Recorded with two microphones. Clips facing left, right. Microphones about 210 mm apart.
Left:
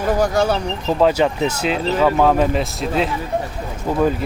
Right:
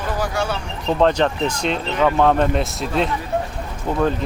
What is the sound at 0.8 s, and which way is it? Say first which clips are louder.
Speech: even; 5° left (ahead or behind).